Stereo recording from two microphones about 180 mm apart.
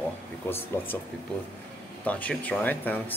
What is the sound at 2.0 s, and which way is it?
Speech, 10° left (ahead or behind).